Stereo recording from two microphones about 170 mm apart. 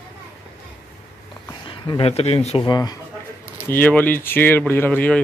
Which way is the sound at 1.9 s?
35° left (ahead or behind).